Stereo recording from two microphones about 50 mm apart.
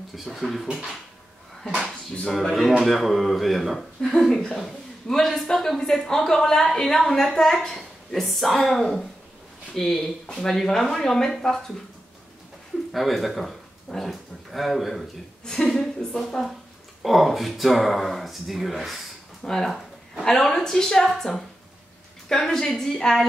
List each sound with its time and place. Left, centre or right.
0.1 s speech: centre
2.4 s speech: centre
12.9 s speech: centre
16.1 s a woman's voice: centre
17.0 s speech: centre